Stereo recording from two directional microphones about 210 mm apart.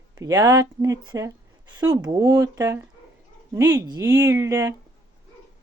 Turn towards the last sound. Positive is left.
turn(degrees=-15)  # may be behind; listen again after turning